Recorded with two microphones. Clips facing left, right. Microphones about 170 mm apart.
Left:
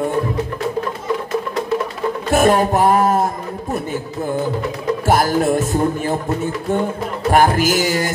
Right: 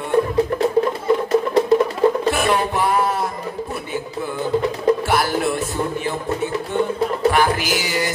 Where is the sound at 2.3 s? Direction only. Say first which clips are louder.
Left 5 dB; 45° left (ahead or behind).